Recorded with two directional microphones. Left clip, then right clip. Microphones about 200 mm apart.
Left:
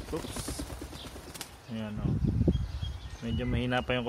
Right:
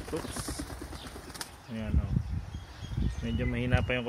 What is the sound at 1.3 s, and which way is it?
Bird, 20° left (ahead or behind).